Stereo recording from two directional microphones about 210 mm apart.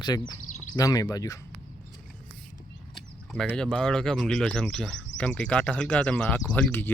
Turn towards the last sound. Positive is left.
turn(degrees=10)  # may be behind; listen again after turning